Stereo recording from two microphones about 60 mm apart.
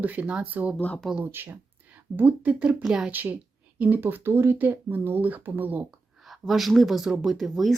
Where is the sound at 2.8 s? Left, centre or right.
Centre.